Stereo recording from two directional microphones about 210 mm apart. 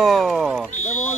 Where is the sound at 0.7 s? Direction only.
35° left (ahead or behind).